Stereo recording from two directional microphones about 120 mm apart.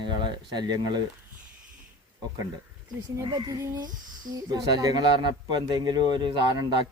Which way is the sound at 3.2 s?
30° right (ahead or behind).